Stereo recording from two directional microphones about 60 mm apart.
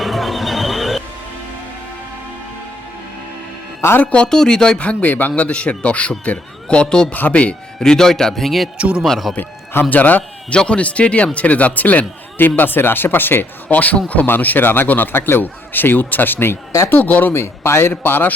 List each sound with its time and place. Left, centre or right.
0.0 s music: centre
3.8 s a man's voice: left
4.0 s speech: left
4.3 s speech: centre
7.1 s speech: left
7.8 s speech: centre
9.3 s speech: left
10.5 s a man's voice: centre
17.3 s a man's voice: left
17.9 s a man's voice: left